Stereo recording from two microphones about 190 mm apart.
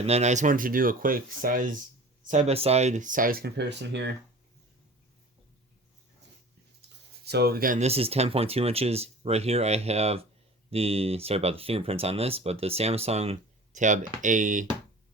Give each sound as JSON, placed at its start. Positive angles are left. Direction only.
{"t": 0.0, "sound": "speech", "side_deg": -35}
{"t": 6.8, "sound": "a sound", "side_deg": -60}
{"t": 7.3, "sound": "speech", "side_deg": -55}